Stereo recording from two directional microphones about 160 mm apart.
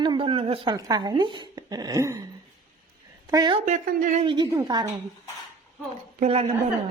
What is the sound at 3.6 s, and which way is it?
Speech, 50° right (ahead or behind).